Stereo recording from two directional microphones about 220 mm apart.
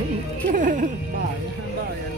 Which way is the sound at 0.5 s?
35° right (ahead or behind).